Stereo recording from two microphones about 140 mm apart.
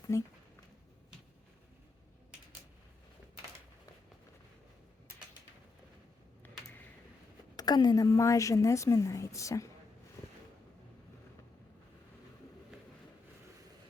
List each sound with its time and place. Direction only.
0.0 s speech: 20° left (ahead or behind)
7.5 s a woman's voice: 30° left (ahead or behind)